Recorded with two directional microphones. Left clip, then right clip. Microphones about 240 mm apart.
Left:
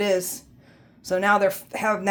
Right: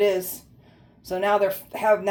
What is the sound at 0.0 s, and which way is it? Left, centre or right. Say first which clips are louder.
Speech: right 1 dB; left.